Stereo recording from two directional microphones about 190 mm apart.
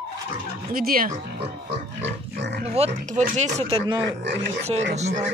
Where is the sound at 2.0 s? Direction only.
65° right (ahead or behind).